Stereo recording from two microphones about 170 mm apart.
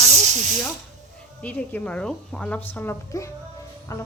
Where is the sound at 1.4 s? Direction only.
10° left (ahead or behind).